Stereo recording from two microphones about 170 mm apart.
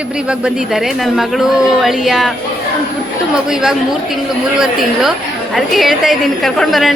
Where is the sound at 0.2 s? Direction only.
5° right (ahead or behind).